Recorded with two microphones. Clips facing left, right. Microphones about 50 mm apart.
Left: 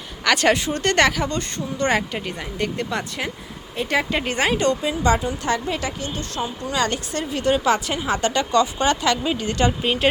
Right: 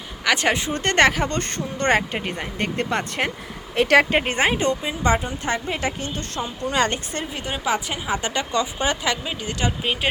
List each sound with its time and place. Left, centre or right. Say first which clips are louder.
0.3 s speech: left 2 dB; centre; by 2.0 s right
2.0 s speech: right 1 dB; right
3.8 s speech: right 6 dB; right
4.1 s a woman's voice: right 1 dB; right
7.3 s speech: left 6 dB; centre
9.2 s speech: left 5 dB; centre